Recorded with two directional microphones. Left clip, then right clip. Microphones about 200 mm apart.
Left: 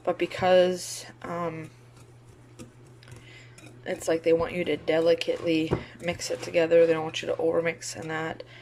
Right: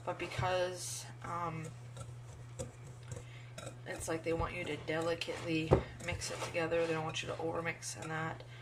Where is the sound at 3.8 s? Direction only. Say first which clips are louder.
Left 13 dB; 50° left (ahead or behind).